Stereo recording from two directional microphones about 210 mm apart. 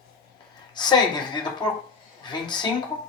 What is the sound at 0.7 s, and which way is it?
Speech, 20° left (ahead or behind).